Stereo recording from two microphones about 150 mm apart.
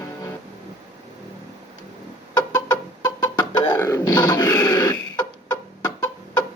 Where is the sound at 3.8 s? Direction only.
20° left (ahead or behind).